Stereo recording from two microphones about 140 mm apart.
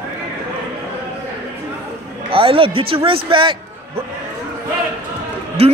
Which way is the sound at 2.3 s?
40° right (ahead or behind).